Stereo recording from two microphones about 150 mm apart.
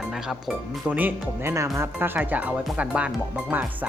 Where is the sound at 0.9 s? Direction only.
10° right (ahead or behind).